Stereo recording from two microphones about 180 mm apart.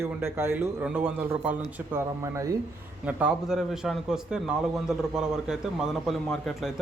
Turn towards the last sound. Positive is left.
turn(degrees=0)  # may be behind; listen again after turning